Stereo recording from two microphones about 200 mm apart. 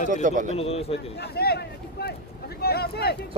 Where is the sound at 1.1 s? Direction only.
55° left (ahead or behind).